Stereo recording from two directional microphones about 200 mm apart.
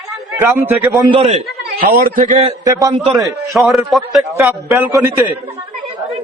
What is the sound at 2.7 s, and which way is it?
Speech, 15° right (ahead or behind).